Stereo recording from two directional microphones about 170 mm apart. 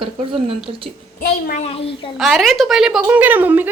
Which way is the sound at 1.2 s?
55° left (ahead or behind).